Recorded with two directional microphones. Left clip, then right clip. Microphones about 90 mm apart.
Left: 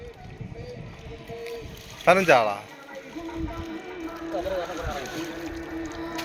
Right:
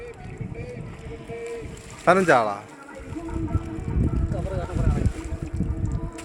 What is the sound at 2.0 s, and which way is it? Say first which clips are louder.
Speech: even; 10° right (ahead or behind).